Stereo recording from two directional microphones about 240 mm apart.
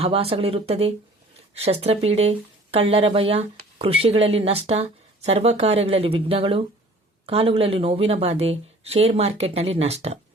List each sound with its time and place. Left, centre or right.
0.0 s speech: right